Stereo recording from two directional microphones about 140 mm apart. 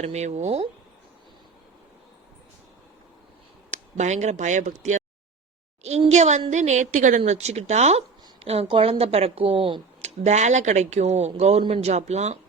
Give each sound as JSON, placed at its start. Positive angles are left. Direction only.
{"t": 0.0, "sound": "a woman's voice", "side_deg": -50}
{"t": 3.7, "sound": "speech", "side_deg": -55}
{"t": 6.1, "sound": "speech", "side_deg": -55}
{"t": 7.2, "sound": "a woman's voice", "side_deg": -50}
{"t": 10.0, "sound": "a woman's voice", "side_deg": -55}